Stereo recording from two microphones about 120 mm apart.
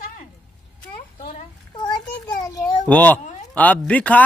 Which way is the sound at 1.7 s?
35° left (ahead or behind).